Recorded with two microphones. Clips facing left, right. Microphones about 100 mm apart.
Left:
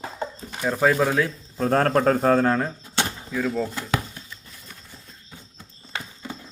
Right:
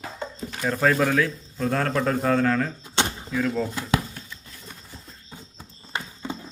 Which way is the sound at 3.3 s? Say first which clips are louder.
Even; 5° left (ahead or behind).